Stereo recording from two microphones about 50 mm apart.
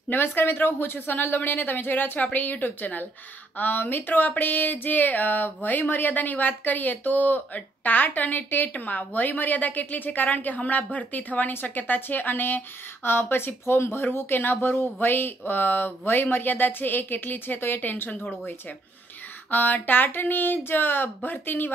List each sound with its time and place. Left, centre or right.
0.1 s speech: left
19.5 s speech: left